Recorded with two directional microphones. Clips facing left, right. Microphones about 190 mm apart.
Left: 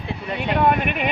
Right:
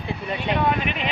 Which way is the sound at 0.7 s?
55° left (ahead or behind).